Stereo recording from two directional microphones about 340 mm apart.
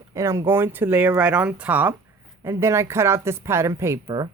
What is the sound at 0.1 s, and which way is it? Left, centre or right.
Speech, centre.